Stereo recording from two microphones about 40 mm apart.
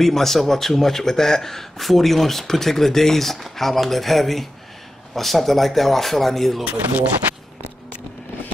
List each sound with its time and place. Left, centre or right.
0.0 s a man's voice: centre
6.6 s speech: right